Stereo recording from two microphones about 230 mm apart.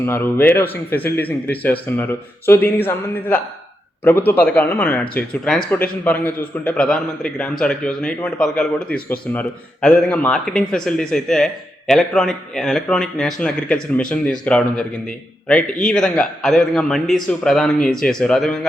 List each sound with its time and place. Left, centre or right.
0.0 s speech: centre